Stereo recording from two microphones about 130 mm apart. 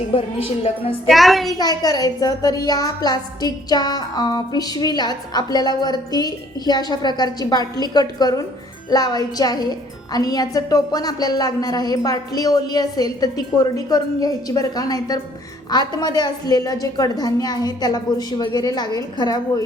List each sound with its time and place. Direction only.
0.1 s a woman's voice: 45° left (ahead or behind)
1.0 s a child's voice: centre (ahead or behind)
1.5 s a woman's voice: 30° left (ahead or behind)